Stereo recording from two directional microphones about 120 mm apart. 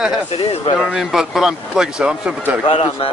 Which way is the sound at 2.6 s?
55° left (ahead or behind).